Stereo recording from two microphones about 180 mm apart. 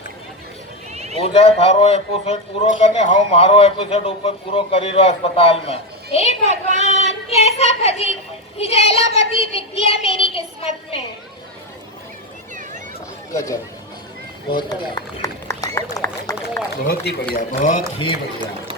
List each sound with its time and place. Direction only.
0.9 s a sound: 35° right (ahead or behind)
1.2 s a man's voice: 35° left (ahead or behind)
6.5 s speech: 40° right (ahead or behind)
7.3 s a woman's voice: 35° left (ahead or behind)
13.3 s a man's voice: 20° left (ahead or behind)
16.8 s a man's voice: 60° left (ahead or behind)
17.5 s speech: 45° left (ahead or behind)